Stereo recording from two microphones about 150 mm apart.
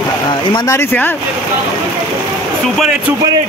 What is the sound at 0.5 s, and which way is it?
Speech, 20° left (ahead or behind).